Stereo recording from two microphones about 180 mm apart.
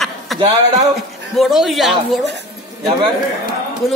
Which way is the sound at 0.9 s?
Centre (ahead or behind).